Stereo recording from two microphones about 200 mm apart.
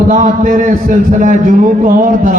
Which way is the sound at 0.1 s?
40° right (ahead or behind).